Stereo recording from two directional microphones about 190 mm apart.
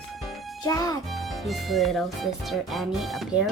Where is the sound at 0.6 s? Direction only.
20° left (ahead or behind).